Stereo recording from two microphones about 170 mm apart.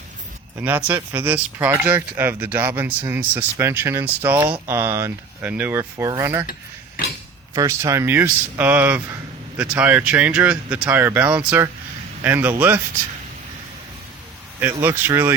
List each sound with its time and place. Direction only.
0.6 s speech: 10° right (ahead or behind)
6.5 s cutlery: 60° left (ahead or behind)
7.5 s speech: 20° right (ahead or behind)
14.6 s speech: 10° right (ahead or behind)